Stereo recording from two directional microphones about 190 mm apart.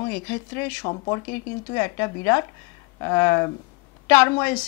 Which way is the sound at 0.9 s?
20° left (ahead or behind).